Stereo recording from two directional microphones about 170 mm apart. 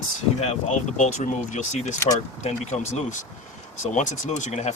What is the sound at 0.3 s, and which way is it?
Speech, 40° left (ahead or behind).